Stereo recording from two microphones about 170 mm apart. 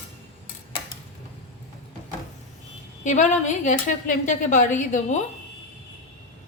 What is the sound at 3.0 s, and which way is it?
A woman's voice, 45° left (ahead or behind).